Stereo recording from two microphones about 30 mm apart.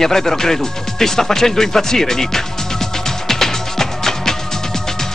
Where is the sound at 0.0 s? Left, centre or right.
Centre.